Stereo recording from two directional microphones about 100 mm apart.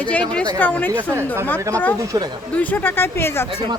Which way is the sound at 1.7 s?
15° left (ahead or behind).